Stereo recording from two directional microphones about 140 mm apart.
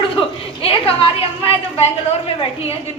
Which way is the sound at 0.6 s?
40° left (ahead or behind).